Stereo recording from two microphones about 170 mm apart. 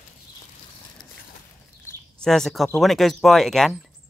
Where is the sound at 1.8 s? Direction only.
5° left (ahead or behind).